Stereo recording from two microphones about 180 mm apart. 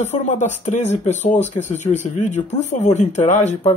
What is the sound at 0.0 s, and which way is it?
Speech, 40° left (ahead or behind).